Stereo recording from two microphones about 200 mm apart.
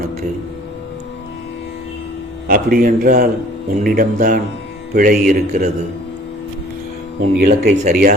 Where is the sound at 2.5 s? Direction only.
45° right (ahead or behind).